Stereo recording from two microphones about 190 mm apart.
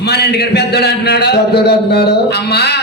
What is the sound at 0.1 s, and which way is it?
A man's voice, 60° left (ahead or behind).